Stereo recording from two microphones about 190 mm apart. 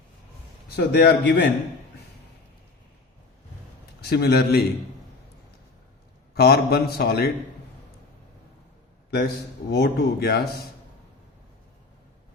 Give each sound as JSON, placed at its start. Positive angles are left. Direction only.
{"t": 0.8, "sound": "a man's voice", "side_deg": 55}
{"t": 4.1, "sound": "a man's voice", "side_deg": 55}
{"t": 6.3, "sound": "a man's voice", "side_deg": 55}
{"t": 9.6, "sound": "a man's voice", "side_deg": 60}